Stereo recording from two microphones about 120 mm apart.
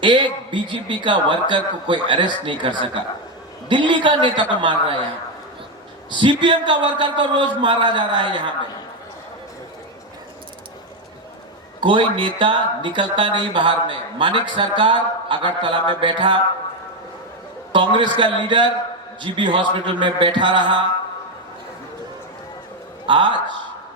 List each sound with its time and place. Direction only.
0.0 s speech: 40° right (ahead or behind)
6.1 s a man's voice: 40° right (ahead or behind)
11.8 s speech: 45° right (ahead or behind)
17.7 s speech: 40° right (ahead or behind)
23.0 s speech: 40° right (ahead or behind)